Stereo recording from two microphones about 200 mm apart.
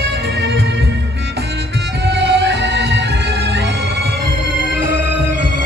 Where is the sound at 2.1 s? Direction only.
60° right (ahead or behind).